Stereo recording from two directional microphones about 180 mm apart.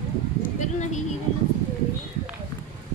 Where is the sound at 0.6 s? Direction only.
40° left (ahead or behind).